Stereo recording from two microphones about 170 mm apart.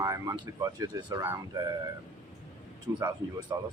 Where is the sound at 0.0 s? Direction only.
20° right (ahead or behind).